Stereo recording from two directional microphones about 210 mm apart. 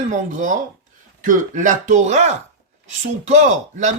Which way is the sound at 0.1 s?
35° right (ahead or behind).